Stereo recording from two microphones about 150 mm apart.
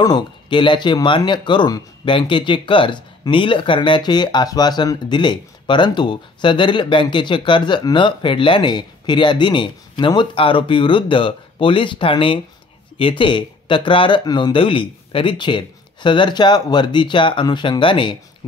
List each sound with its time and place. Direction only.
0.0 s speech: 30° left (ahead or behind)